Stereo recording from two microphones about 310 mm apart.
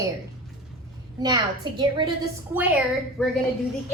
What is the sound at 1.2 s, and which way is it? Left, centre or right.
Speech, centre.